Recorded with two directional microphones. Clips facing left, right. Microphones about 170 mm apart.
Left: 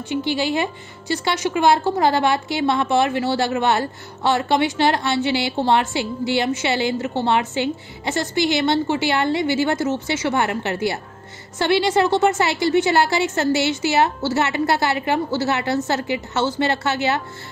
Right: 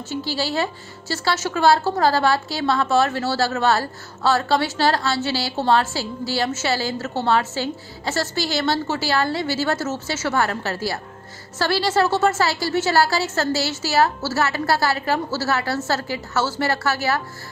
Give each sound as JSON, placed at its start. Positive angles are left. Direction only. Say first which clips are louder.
{"t": 0.4, "sound": "a woman's voice", "louder": "left 2 dB", "side_deg": 15}